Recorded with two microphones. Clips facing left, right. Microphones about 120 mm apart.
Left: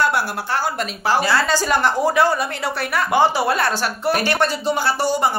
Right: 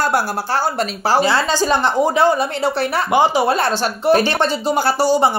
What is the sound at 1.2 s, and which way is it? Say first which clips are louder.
Speech: right 2 dB; 20° right (ahead or behind).